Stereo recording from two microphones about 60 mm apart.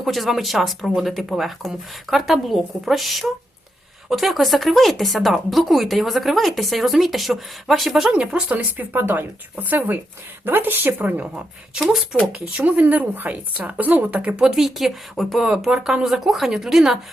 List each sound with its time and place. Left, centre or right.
0.0 s speech: centre
8.1 s a woman's voice: right
11.7 s speech: centre
12.3 s speech: right
12.8 s speech: right
14.4 s speech: centre